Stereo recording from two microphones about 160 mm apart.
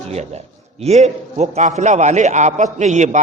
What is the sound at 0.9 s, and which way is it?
A man's voice, 45° right (ahead or behind).